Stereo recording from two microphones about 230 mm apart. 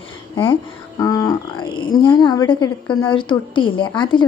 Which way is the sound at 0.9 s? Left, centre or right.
Centre.